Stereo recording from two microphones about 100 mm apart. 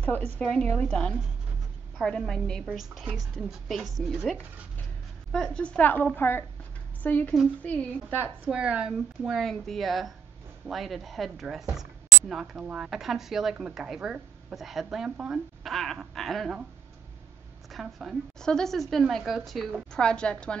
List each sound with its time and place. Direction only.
0.0 s a woman's voice: 15° left (ahead or behind); by 3.9 s centre (ahead or behind)
5.3 s a woman's voice: 5° left (ahead or behind)
8.5 s speech: 10° right (ahead or behind)
17.6 s a woman's voice: centre (ahead or behind)